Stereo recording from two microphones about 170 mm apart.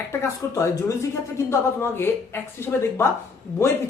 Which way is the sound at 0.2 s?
20° left (ahead or behind).